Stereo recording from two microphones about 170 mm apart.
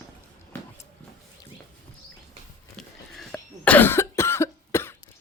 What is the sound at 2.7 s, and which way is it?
Cough, centre (ahead or behind).